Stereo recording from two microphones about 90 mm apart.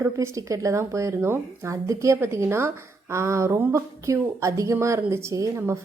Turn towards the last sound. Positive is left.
turn(degrees=-35)  # may be behind; listen again after turning